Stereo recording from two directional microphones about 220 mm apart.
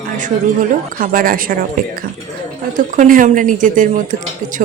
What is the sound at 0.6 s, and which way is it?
Speech, 40° right (ahead or behind).